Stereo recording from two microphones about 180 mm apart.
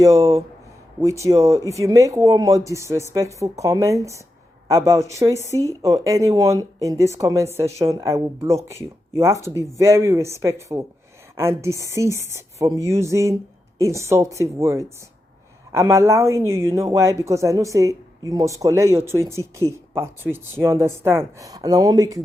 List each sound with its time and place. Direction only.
0.0 s a woman's voice: 15° right (ahead or behind)